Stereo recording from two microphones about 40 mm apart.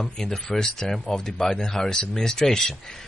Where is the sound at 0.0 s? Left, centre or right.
Centre.